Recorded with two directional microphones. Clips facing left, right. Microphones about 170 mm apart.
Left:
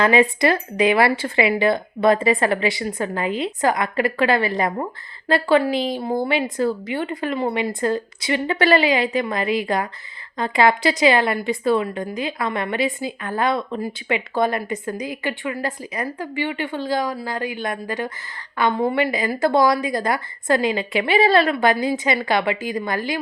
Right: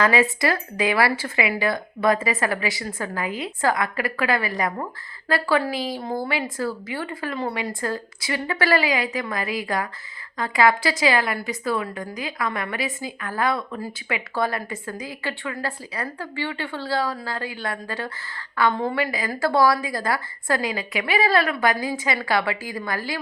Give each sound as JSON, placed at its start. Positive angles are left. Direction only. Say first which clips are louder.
{"t": 0.0, "sound": "a woman's voice", "louder": "left 4 dB", "side_deg": 20}